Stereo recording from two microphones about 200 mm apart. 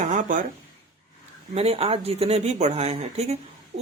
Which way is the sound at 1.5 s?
30° right (ahead or behind).